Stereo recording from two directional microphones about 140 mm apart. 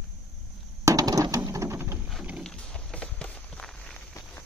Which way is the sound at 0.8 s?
25° right (ahead or behind).